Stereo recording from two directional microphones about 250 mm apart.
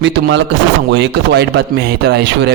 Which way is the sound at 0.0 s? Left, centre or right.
Right.